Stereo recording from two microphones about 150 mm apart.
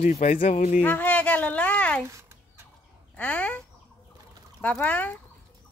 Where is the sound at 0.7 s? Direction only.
10° left (ahead or behind).